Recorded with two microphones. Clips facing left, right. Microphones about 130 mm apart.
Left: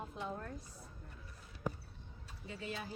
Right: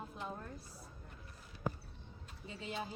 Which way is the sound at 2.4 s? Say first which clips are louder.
Right 1 dB; 20° right (ahead or behind).